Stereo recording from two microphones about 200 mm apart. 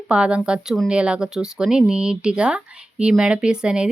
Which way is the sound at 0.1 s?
5° right (ahead or behind).